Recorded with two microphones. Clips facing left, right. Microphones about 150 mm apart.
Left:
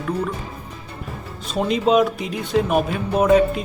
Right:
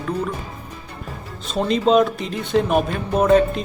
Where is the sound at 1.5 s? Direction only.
10° left (ahead or behind).